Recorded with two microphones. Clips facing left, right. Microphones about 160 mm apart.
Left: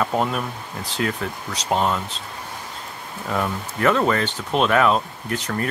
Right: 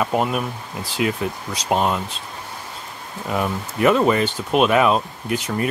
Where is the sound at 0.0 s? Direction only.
15° right (ahead or behind).